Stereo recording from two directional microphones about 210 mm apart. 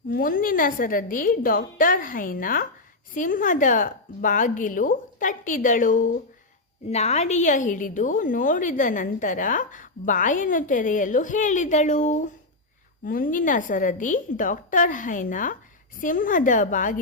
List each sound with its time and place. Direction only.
0.1 s a woman's voice: 40° left (ahead or behind)